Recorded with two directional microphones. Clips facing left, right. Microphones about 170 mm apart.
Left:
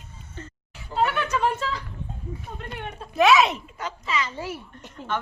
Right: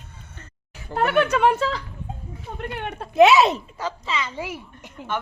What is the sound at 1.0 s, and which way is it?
Speech, 60° right (ahead or behind).